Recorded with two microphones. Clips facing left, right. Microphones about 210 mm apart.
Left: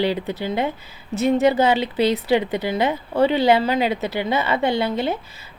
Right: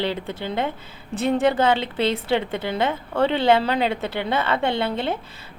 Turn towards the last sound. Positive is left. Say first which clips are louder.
# left 2 dB
turn(degrees=5)  # may be behind; listen again after turning